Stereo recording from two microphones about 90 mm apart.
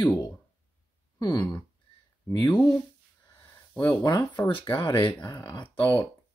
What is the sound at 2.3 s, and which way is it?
Speech, 45° left (ahead or behind).